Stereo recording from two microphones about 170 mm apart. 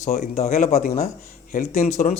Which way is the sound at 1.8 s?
45° left (ahead or behind).